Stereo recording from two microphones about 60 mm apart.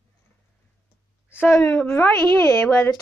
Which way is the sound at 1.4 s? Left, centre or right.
Left.